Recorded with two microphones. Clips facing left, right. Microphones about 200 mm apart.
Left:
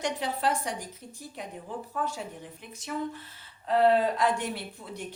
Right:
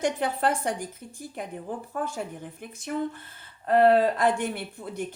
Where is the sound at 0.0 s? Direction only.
55° right (ahead or behind).